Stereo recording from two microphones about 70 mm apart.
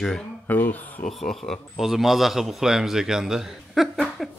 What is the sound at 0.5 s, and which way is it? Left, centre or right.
Speech, left.